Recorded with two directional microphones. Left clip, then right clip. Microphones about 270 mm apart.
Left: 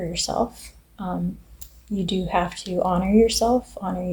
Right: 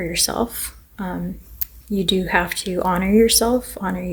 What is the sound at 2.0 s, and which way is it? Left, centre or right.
Speech, right.